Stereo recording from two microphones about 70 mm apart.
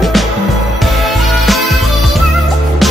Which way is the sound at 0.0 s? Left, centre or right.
Centre.